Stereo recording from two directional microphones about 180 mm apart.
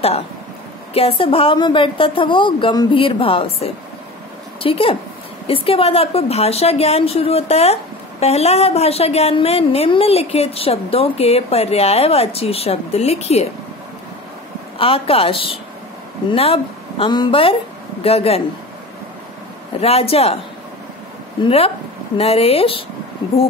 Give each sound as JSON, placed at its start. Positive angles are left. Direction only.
{"t": 0.9, "sound": "a woman's voice", "side_deg": 30}
{"t": 14.8, "sound": "a woman's voice", "side_deg": 30}
{"t": 19.8, "sound": "a woman's voice", "side_deg": 35}
{"t": 21.4, "sound": "a woman's voice", "side_deg": 30}